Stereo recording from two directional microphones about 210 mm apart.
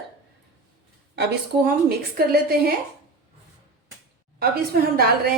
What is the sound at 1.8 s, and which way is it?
Speech, 45° right (ahead or behind).